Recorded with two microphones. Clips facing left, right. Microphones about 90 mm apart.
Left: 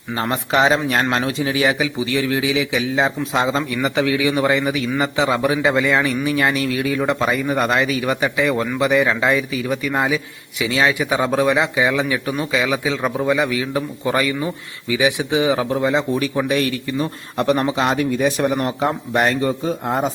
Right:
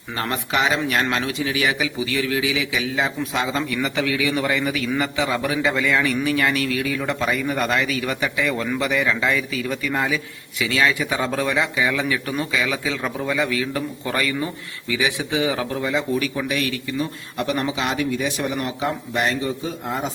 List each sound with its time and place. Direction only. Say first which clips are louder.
0.2 s speech: left 5 dB; 30° left (ahead or behind); by 20.1 s 45° left (ahead or behind)